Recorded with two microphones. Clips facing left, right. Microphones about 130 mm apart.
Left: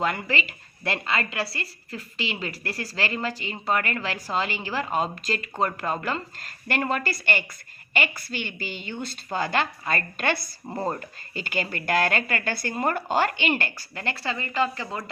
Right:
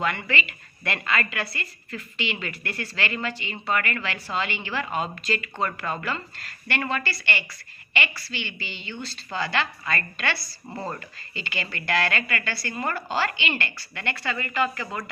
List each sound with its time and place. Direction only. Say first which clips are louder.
0.0 s a woman's voice: left 1 dB; 35° left (ahead or behind)
10.7 s speech: left 4 dB; 25° left (ahead or behind)
11.3 s a woman's voice: left 4 dB; 45° left (ahead or behind)